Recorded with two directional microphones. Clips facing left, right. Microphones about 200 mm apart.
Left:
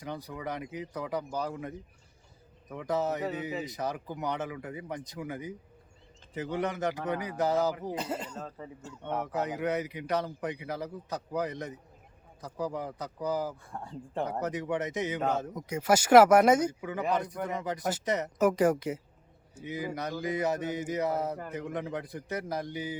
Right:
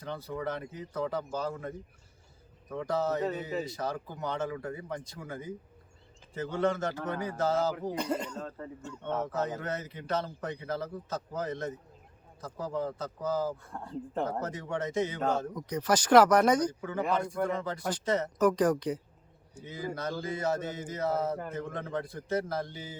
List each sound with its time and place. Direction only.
0.0 s speech: 15° left (ahead or behind)
2.7 s speech: 20° left (ahead or behind)
7.9 s speech: 5° left (ahead or behind)
9.0 s speech: 15° left (ahead or behind)